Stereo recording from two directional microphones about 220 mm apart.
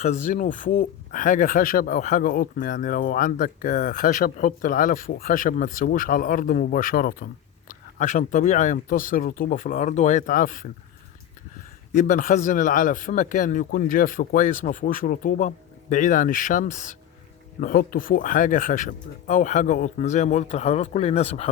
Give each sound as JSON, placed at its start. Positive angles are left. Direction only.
{"t": 0.0, "sound": "speech", "side_deg": 35}
{"t": 11.9, "sound": "speech", "side_deg": 35}